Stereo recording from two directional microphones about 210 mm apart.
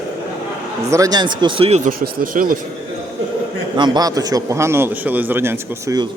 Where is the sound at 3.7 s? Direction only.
20° right (ahead or behind).